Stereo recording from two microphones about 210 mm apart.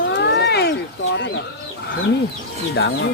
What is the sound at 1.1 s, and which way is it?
Speech, 60° left (ahead or behind).